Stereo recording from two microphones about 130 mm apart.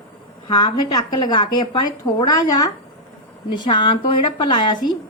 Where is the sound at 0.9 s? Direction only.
30° left (ahead or behind).